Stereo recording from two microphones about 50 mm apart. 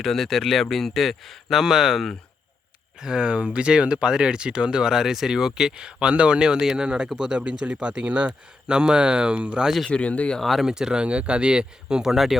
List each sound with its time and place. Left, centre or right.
0.0 s speech: centre; by 9.6 s right
9.9 s speech: left
10.4 s speech: centre
10.7 s speech: centre